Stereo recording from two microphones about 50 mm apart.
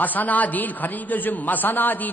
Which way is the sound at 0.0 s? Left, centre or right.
Left.